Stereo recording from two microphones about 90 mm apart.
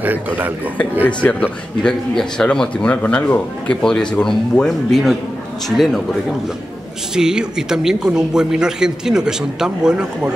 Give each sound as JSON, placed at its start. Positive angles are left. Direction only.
{"t": 0.0, "sound": "a man's voice", "side_deg": -20}
{"t": 1.0, "sound": "a man's voice", "side_deg": 15}
{"t": 7.2, "sound": "speech", "side_deg": -5}